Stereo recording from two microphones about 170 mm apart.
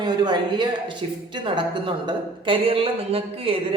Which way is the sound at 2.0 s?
30° right (ahead or behind).